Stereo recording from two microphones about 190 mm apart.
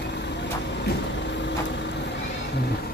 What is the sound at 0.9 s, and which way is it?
Vehicle, 70° left (ahead or behind).